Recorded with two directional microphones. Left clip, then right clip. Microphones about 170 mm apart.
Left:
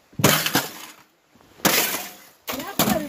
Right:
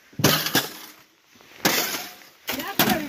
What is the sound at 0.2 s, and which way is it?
Breaking, 30° left (ahead or behind).